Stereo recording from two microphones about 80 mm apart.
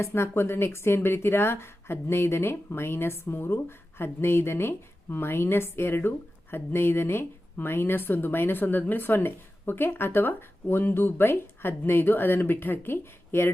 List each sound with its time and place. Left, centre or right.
0.0 s speech: left